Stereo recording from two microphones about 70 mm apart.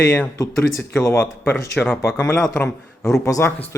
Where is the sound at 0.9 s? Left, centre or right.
Left.